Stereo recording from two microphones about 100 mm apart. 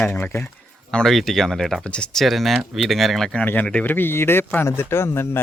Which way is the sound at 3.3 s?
15° left (ahead or behind).